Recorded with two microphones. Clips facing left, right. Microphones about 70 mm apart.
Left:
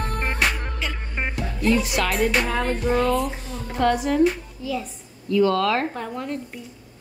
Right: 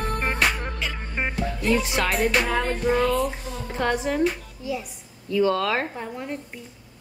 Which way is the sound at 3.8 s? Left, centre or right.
Right.